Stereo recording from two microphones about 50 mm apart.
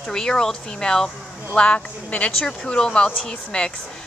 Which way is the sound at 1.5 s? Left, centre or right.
Left.